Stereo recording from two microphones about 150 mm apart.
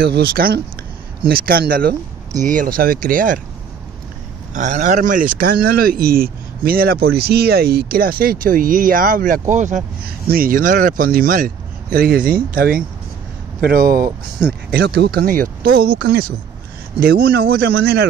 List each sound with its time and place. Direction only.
0.0 s speech: 90° right; by 3.3 s 65° right (ahead or behind)
4.6 s speech: 55° right (ahead or behind)
10.0 s speech: 85° right
13.6 s speech: 90° right